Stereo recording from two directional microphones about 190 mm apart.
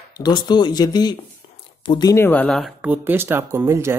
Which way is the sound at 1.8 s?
20° left (ahead or behind).